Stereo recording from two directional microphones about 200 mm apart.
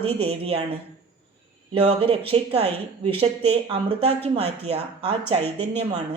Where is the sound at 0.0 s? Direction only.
30° right (ahead or behind).